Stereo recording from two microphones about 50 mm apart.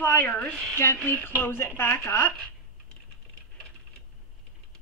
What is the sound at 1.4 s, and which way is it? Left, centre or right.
Speech, left.